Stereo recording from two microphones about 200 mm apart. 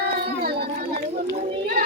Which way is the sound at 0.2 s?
50° right (ahead or behind).